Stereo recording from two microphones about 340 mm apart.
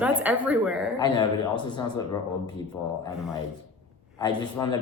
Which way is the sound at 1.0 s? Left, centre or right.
Centre.